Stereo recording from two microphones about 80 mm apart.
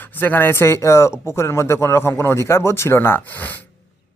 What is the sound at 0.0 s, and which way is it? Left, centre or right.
A man's voice, left.